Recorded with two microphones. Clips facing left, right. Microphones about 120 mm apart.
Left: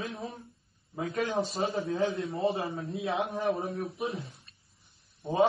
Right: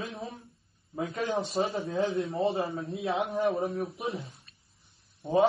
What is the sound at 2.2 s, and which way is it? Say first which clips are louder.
Speech: right 4 dB; 30° right (ahead or behind).